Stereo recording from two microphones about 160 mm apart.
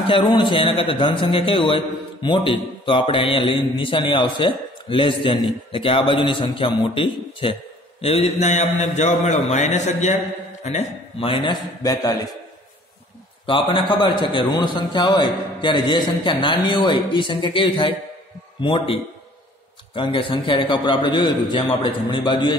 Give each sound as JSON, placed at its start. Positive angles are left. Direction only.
{"t": 0.0, "sound": "a man's voice", "side_deg": 30}
{"t": 11.2, "sound": "a man's voice", "side_deg": 30}
{"t": 13.5, "sound": "a man's voice", "side_deg": 30}